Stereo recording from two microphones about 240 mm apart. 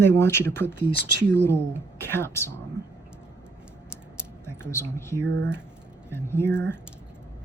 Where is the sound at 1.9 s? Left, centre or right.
Centre.